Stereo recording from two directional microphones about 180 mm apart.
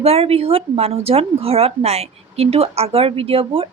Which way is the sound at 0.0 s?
35° right (ahead or behind).